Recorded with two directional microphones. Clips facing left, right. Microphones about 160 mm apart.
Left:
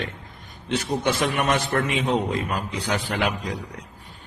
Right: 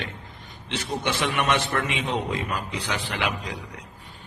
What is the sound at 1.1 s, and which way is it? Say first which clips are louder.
A man's voice: left 1 dB; 45° left (ahead or behind).